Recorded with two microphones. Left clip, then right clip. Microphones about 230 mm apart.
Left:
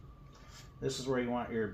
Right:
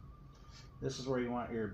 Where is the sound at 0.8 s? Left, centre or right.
Centre.